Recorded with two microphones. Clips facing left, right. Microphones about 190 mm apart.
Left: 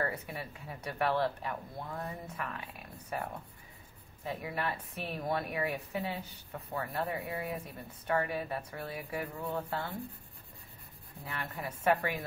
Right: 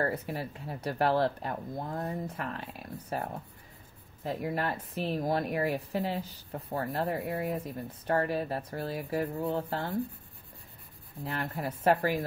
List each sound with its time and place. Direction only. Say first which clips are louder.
0.0 s a woman's voice: right 5 dB; 35° right (ahead or behind)
7.2 s speech: right 5 dB; 55° right (ahead or behind)
8.1 s a woman's voice: right 3 dB; 35° right (ahead or behind)
11.2 s a woman's voice: right 6 dB; 30° right (ahead or behind)